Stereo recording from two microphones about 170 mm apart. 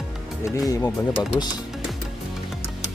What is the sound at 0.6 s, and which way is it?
Speech, 20° left (ahead or behind).